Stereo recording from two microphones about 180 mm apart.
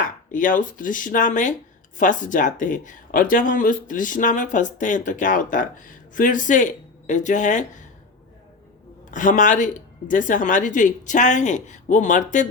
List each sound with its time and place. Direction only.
0.3 s speech: 45° left (ahead or behind)
9.0 s a man's voice: 45° left (ahead or behind)